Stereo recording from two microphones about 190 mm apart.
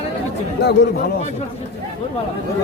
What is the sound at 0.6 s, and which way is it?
Speech, 60° left (ahead or behind).